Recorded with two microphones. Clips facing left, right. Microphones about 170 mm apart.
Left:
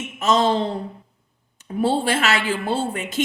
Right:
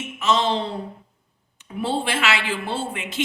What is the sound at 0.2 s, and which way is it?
Speech, 40° left (ahead or behind).